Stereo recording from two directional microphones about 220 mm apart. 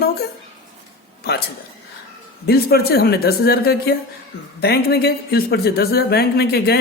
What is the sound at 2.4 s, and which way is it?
Speech, 45° left (ahead or behind).